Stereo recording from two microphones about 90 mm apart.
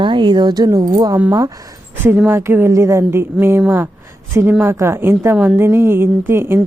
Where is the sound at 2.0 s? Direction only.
25° right (ahead or behind).